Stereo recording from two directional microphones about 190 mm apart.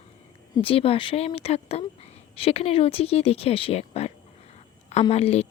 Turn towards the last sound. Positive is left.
turn(degrees=35)  # may be behind; listen again after turning